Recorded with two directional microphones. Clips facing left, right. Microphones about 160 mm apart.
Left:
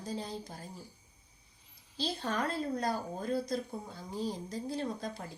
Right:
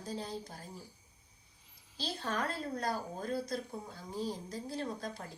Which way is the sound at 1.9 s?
20° left (ahead or behind).